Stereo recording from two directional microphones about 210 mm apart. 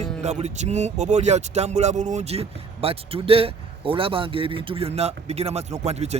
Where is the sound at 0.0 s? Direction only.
30° right (ahead or behind).